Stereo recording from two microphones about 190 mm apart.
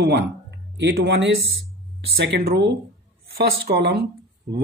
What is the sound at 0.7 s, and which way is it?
Speech, 65° right (ahead or behind).